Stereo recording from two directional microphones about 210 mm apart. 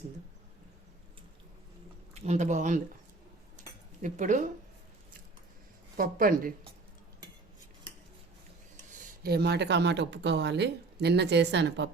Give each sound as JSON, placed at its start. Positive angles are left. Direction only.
{"t": 2.1, "sound": "speech", "side_deg": -30}
{"t": 4.0, "sound": "speech", "side_deg": -35}
{"t": 6.0, "sound": "speech", "side_deg": -40}
{"t": 8.9, "sound": "speech", "side_deg": -50}